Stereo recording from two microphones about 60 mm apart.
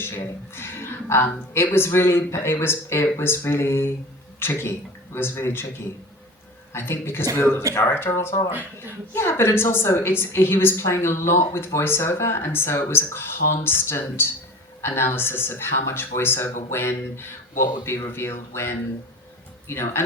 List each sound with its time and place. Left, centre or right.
0.5 s speech: left